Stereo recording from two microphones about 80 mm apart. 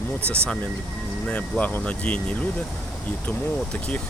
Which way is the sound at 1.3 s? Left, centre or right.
Centre.